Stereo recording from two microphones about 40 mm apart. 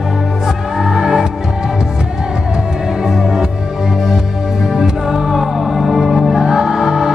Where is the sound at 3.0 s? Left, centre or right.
Centre.